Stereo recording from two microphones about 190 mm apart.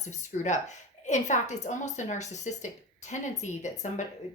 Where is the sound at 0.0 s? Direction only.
40° left (ahead or behind).